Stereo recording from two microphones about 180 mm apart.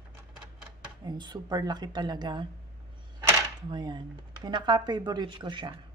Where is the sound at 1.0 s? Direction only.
25° right (ahead or behind).